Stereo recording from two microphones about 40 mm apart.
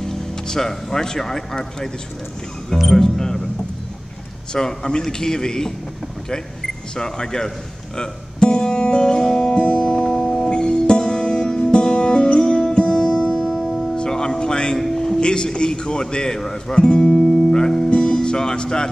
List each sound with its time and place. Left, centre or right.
0.0 s speech: centre
2.9 s a man's voice: centre
4.6 s a man's voice: centre
7.0 s a man's voice: centre
8.0 s music: centre
13.5 s music: centre
13.9 s music: centre
15.1 s a man's voice: left
16.3 s speech: centre
16.7 s music: left